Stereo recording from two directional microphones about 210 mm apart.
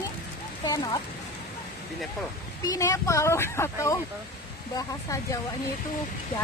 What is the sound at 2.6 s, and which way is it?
Speech, 15° left (ahead or behind).